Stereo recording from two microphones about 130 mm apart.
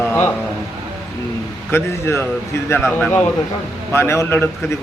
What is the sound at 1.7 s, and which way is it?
A man's voice, 20° left (ahead or behind).